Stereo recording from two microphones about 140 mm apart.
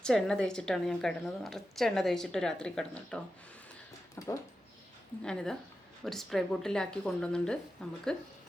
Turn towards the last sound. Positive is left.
turn(degrees=5)  # may be behind; listen again after turning